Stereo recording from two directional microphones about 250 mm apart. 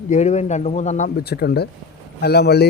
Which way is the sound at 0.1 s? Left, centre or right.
Left.